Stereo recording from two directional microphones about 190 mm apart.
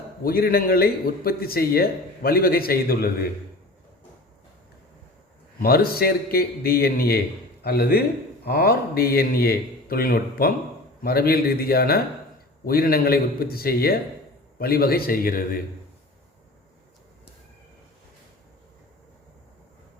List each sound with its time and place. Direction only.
0.2 s a man's voice: 50° left (ahead or behind)
5.5 s a man's voice: 50° left (ahead or behind)